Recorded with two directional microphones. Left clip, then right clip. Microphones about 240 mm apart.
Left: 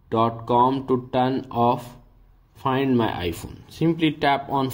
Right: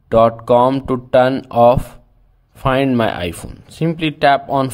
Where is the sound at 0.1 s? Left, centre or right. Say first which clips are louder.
Right 10 dB; right.